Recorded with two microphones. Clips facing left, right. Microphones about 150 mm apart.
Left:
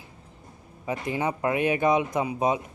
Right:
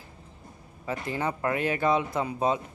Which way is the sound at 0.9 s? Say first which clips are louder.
Left 2 dB; 15° left (ahead or behind).